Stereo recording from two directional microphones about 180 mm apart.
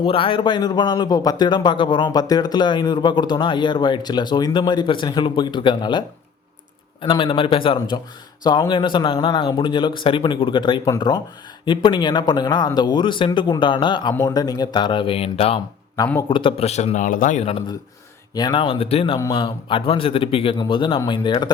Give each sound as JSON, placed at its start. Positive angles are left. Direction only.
{"t": 0.0, "sound": "a man's voice", "side_deg": 30}
{"t": 16.0, "sound": "a man's voice", "side_deg": 20}
{"t": 18.3, "sound": "a man's voice", "side_deg": 25}